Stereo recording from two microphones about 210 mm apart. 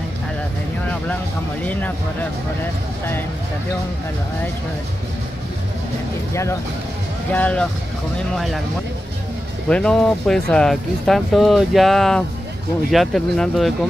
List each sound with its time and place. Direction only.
1.6 s speech: 5° left (ahead or behind)
7.3 s speech: 5° left (ahead or behind)
9.7 s speech: 5° left (ahead or behind)